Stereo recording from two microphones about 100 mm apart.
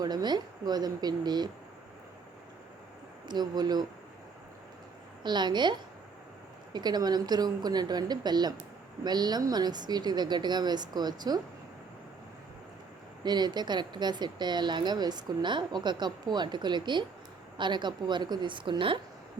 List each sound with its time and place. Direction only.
0.0 s speech: 45° right (ahead or behind)
3.2 s speech: 45° right (ahead or behind)
5.2 s speech: 45° right (ahead or behind)
13.2 s speech: 45° right (ahead or behind)